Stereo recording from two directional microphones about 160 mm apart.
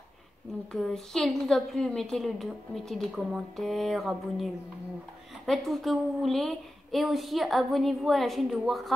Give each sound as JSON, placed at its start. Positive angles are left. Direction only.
{"t": 0.7, "sound": "a woman's voice", "side_deg": 5}
{"t": 5.5, "sound": "a woman's voice", "side_deg": 0}